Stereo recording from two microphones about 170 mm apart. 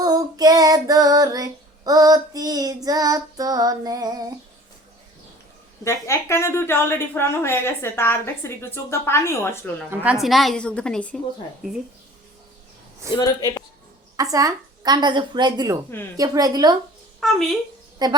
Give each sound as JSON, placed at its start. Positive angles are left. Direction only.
{"t": 0.0, "sound": "child singing", "side_deg": -20}
{"t": 5.8, "sound": "a woman's voice", "side_deg": 15}
{"t": 9.9, "sound": "a woman's voice", "side_deg": -10}
{"t": 13.1, "sound": "a man's voice", "side_deg": 25}
{"t": 14.2, "sound": "a woman's voice", "side_deg": -20}
{"t": 17.2, "sound": "a woman's voice", "side_deg": 0}
{"t": 18.0, "sound": "a woman's voice", "side_deg": -25}